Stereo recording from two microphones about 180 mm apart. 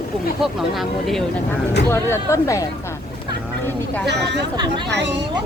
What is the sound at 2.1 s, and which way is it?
Speech, 15° left (ahead or behind).